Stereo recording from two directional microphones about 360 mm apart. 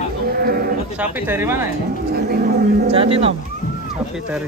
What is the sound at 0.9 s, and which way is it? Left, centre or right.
Speech, centre.